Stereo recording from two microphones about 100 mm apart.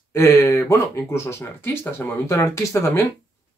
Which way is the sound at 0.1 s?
30° left (ahead or behind).